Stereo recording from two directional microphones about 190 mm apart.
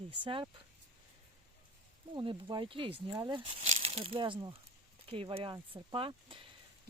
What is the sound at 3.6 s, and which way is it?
Speech, 35° right (ahead or behind).